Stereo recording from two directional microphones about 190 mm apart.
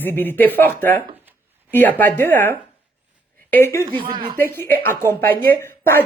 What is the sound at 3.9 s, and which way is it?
Speech, 25° right (ahead or behind).